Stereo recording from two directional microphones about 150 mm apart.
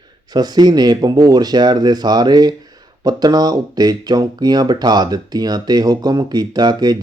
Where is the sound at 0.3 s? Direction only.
25° right (ahead or behind).